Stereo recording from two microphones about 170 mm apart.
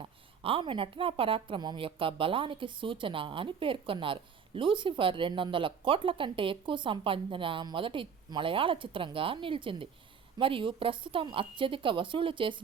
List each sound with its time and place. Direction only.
0.0 s a woman's voice: 30° right (ahead or behind)